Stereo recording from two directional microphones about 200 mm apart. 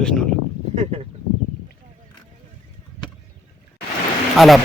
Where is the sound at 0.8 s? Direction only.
30° right (ahead or behind).